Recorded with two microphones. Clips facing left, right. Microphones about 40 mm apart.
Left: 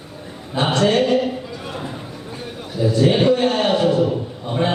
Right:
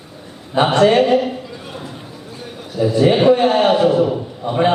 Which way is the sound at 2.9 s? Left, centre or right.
Right.